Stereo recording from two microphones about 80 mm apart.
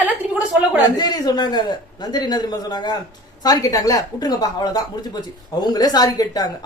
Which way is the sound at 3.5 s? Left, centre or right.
Left.